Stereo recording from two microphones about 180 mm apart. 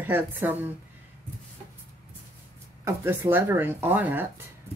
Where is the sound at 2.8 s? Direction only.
10° right (ahead or behind).